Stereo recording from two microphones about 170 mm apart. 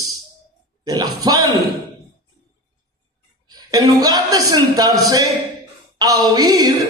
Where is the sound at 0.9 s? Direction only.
20° right (ahead or behind).